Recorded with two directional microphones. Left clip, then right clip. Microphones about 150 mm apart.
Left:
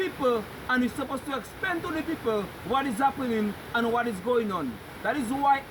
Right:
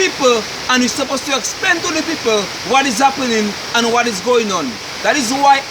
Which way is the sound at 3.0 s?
15° right (ahead or behind).